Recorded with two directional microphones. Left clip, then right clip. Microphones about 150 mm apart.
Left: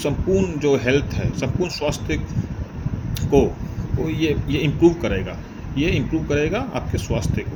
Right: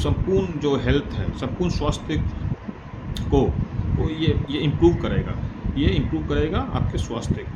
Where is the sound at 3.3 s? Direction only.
15° left (ahead or behind).